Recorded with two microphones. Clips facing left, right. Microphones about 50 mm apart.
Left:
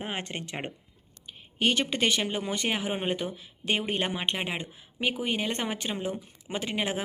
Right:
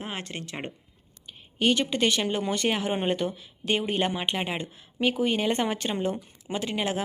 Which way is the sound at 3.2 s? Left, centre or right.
Left.